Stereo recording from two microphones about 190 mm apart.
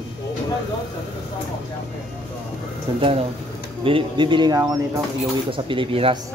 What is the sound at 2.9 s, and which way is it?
Speech, 30° right (ahead or behind).